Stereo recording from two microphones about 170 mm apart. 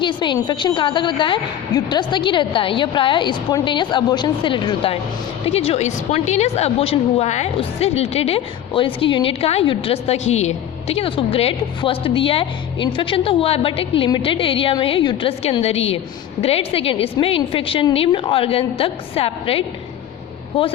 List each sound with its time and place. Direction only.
0.0 s a woman's voice: 25° left (ahead or behind)